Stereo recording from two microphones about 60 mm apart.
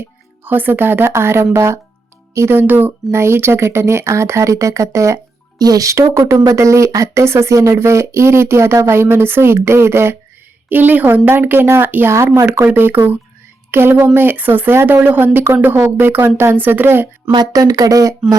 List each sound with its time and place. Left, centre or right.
0.4 s speech: right
3.1 s speech: right
10.7 s speech: right
17.5 s speech: right